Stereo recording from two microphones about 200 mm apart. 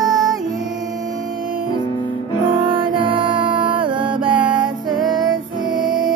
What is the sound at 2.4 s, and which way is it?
Music, 25° right (ahead or behind).